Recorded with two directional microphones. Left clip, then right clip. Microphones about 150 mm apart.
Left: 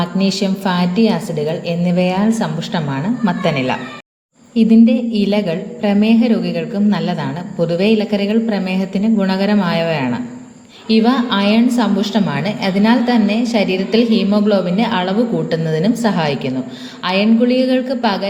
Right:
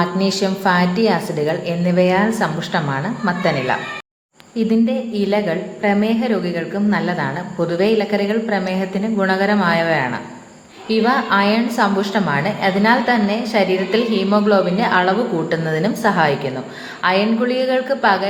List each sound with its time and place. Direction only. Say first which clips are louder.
0.0 s a woman's voice: even; 30° left (ahead or behind)
4.5 s a woman's voice: left 5 dB; 45° left (ahead or behind)